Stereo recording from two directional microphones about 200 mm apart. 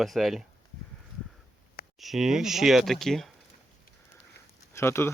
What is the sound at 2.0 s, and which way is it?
Speech, centre (ahead or behind).